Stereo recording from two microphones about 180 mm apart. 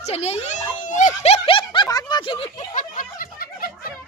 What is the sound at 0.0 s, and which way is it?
Speech, 35° left (ahead or behind).